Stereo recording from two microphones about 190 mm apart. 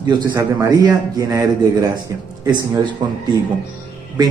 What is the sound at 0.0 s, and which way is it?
A man's voice, 20° right (ahead or behind).